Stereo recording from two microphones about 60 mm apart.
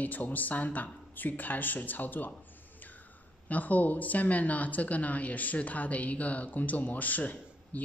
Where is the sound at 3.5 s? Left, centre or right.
Left.